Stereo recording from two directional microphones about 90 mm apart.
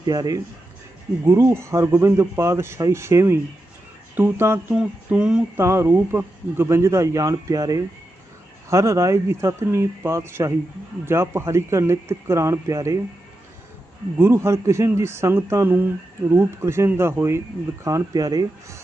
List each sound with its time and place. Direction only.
0.0 s speech: 45° right (ahead or behind)
1.2 s speech: 30° right (ahead or behind)
4.7 s a sound: 15° right (ahead or behind)
5.5 s speech: 25° right (ahead or behind)
14.2 s speech: 25° right (ahead or behind)
17.8 s speech: 40° right (ahead or behind)